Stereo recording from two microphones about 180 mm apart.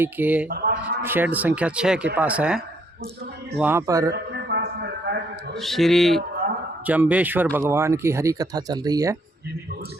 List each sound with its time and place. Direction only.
0.0 s speech: 10° right (ahead or behind)
0.4 s speech: 55° right (ahead or behind)
1.0 s speech: 10° right (ahead or behind)
4.1 s a sound: 65° right (ahead or behind)
5.5 s speech: centre (ahead or behind); by 9.1 s 20° right (ahead or behind)